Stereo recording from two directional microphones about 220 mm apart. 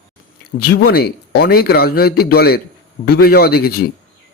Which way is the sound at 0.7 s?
45° left (ahead or behind).